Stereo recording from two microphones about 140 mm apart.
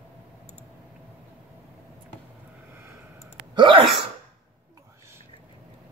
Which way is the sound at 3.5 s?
35° right (ahead or behind).